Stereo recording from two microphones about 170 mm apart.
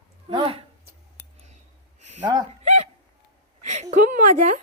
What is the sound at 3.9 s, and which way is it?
Speech, 45° right (ahead or behind).